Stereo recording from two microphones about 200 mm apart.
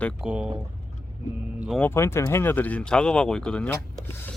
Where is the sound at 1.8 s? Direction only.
10° left (ahead or behind).